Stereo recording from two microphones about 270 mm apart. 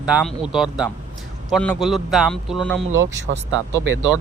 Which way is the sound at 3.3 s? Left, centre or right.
Right.